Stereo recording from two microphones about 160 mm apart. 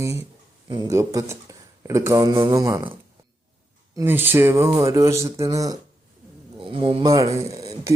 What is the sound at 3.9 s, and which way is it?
Speech, 15° right (ahead or behind).